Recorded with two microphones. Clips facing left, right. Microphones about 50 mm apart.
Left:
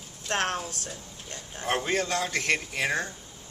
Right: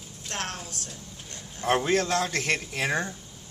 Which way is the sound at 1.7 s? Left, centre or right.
Centre.